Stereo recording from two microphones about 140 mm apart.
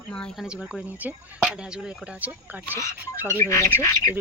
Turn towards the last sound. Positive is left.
turn(degrees=20)  # may be behind; listen again after turning